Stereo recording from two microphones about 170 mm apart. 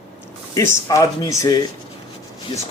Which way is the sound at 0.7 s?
20° left (ahead or behind).